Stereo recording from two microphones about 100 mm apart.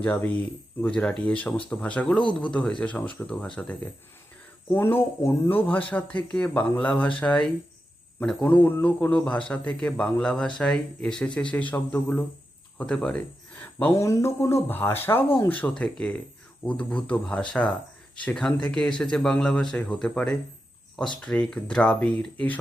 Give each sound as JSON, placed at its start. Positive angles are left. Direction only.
{"t": 0.0, "sound": "speech", "side_deg": 15}
{"t": 4.7, "sound": "speech", "side_deg": 25}
{"t": 14.0, "sound": "speech", "side_deg": 30}